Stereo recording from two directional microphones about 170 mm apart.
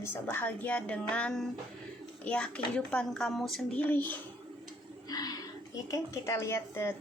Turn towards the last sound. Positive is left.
turn(degrees=15)  # may be behind; listen again after turning